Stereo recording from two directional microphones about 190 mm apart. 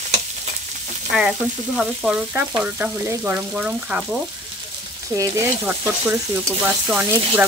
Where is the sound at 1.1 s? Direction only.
5° right (ahead or behind).